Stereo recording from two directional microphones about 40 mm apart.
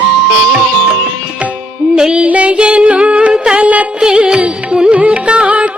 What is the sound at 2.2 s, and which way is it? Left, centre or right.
Music, right.